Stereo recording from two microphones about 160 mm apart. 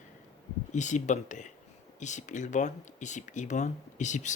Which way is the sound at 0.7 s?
50° left (ahead or behind).